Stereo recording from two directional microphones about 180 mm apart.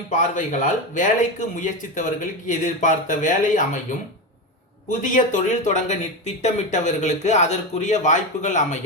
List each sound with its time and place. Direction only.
0.1 s speech: 45° left (ahead or behind)
4.9 s speech: 45° left (ahead or behind)